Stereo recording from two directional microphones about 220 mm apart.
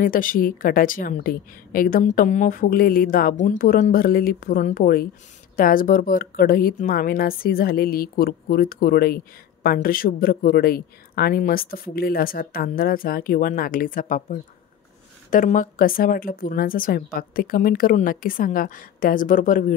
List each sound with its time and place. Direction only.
0.0 s a woman's voice: 40° left (ahead or behind)